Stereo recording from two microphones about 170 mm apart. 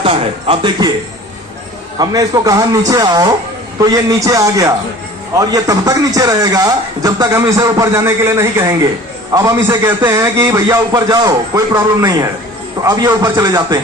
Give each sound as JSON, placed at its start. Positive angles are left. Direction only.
{"t": 0.0, "sound": "speech", "side_deg": -30}
{"t": 2.0, "sound": "a man's voice", "side_deg": -20}